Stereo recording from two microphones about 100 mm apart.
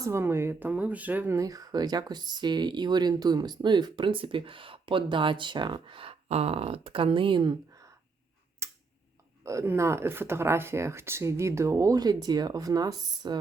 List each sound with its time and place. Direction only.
0.0 s speech: 25° right (ahead or behind)
1.4 s speech: 35° right (ahead or behind); by 7.5 s 55° right (ahead or behind)
7.7 s a sound: 35° right (ahead or behind)
9.4 s speech: 30° right (ahead or behind)